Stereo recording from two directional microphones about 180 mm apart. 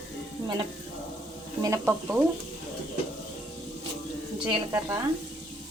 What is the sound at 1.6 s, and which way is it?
Speech, 15° right (ahead or behind).